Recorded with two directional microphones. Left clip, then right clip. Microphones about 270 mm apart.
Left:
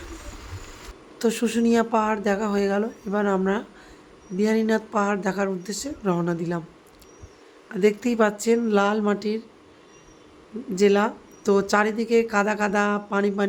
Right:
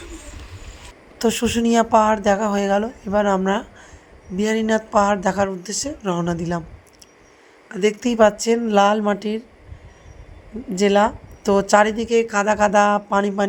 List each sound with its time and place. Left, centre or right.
1.2 s speech: centre
7.7 s speech: centre
10.8 s speech: centre